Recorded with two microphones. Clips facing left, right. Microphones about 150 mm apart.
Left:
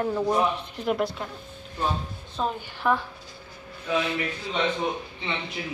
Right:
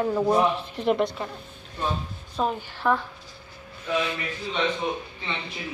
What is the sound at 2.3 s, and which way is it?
Speech, centre (ahead or behind).